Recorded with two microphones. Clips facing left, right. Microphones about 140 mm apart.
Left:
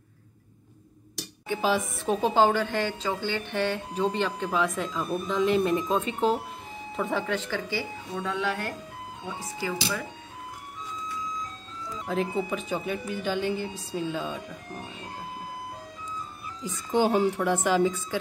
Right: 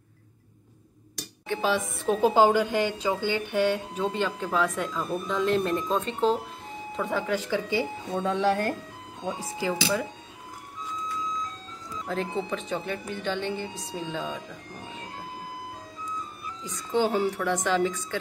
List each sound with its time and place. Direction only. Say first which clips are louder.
1.5 s a woman's voice: even; 5° left (ahead or behind)
7.4 s speech: right 4 dB; 15° right (ahead or behind)
8.2 s speech: right 5 dB; 30° right (ahead or behind)
9.6 s speech: right 4 dB; 20° right (ahead or behind)
12.1 s a woman's voice: left 2 dB; 5° left (ahead or behind)
16.6 s a woman's voice: left 1 dB; 15° left (ahead or behind)